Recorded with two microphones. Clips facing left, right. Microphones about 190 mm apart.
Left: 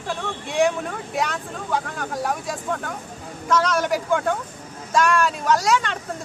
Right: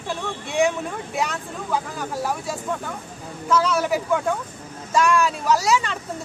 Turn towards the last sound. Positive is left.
turn(degrees=-5)  # may be behind; listen again after turning